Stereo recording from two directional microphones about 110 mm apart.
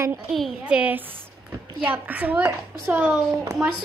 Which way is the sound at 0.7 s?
10° right (ahead or behind).